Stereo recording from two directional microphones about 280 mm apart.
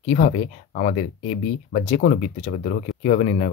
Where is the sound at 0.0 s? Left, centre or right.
Left.